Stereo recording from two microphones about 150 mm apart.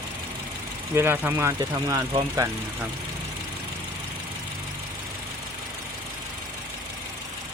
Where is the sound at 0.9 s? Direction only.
15° right (ahead or behind).